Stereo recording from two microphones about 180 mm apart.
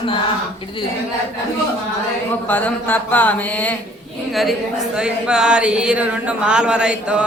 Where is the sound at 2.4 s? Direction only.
10° left (ahead or behind).